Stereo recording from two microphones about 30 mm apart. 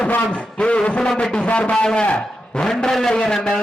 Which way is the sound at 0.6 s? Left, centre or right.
Left.